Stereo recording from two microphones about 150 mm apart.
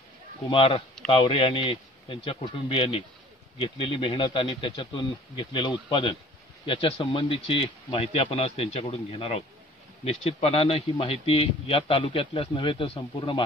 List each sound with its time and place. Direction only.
0.5 s speech: 35° left (ahead or behind)